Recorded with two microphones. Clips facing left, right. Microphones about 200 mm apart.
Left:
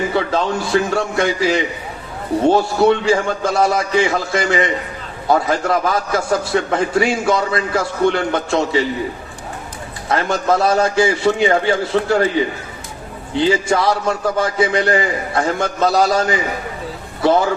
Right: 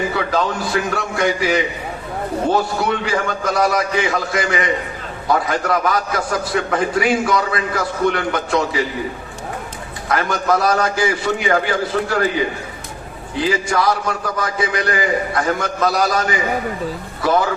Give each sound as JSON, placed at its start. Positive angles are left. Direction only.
{"t": 0.1, "sound": "a man's voice", "side_deg": 25}
{"t": 10.1, "sound": "a man's voice", "side_deg": 25}
{"t": 13.3, "sound": "a man's voice", "side_deg": 25}
{"t": 17.2, "sound": "a man's voice", "side_deg": 25}